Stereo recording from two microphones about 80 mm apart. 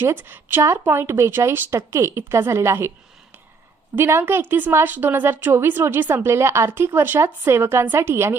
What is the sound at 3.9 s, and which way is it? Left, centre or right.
A woman's voice, right.